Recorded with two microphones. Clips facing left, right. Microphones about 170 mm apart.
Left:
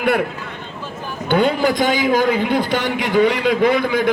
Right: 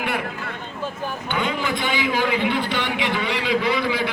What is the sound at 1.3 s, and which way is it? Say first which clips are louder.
A man's voice: left 10 dB; 35° left (ahead or behind).